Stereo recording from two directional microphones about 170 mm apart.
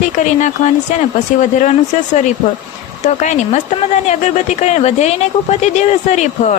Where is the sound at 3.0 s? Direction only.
45° left (ahead or behind).